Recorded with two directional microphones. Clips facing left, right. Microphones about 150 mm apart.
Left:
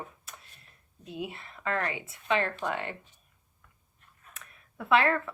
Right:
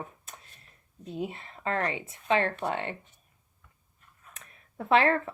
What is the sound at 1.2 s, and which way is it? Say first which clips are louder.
A woman's voice: right 2 dB; 35° right (ahead or behind).